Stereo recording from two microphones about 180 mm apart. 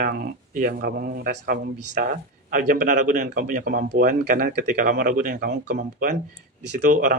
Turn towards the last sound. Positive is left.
turn(degrees=-45)  # may be behind; listen again after turning